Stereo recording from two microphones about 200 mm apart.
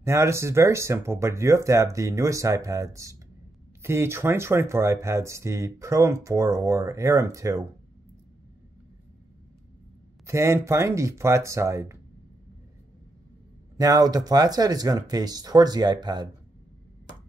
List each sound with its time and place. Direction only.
0.0 s speech: 15° right (ahead or behind)
10.2 s speech: 15° right (ahead or behind)
13.7 s speech: 20° right (ahead or behind)